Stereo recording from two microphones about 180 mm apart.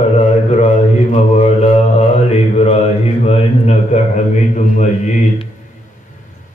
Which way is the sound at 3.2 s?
35° left (ahead or behind).